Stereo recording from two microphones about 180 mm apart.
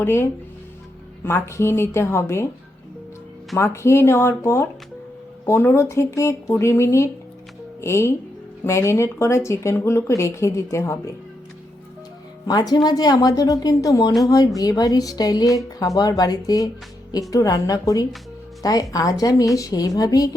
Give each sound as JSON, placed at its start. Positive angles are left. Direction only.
{"t": 0.0, "sound": "speech", "side_deg": 15}
{"t": 3.6, "sound": "speech", "side_deg": 15}
{"t": 12.5, "sound": "speech", "side_deg": 20}